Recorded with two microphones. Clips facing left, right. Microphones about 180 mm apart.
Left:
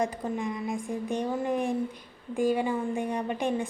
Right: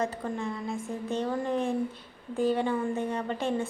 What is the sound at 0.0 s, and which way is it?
A woman's voice, 15° left (ahead or behind).